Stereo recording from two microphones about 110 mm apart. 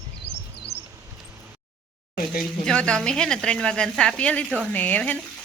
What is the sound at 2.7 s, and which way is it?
A woman's voice, 5° left (ahead or behind).